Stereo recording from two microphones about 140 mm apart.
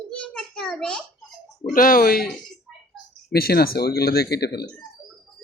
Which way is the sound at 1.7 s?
90° left.